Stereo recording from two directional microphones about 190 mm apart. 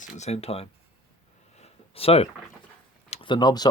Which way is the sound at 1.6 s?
30° left (ahead or behind).